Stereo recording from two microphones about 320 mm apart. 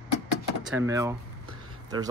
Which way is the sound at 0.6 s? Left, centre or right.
Centre.